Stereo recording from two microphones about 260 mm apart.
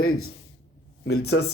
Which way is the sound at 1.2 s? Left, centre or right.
Left.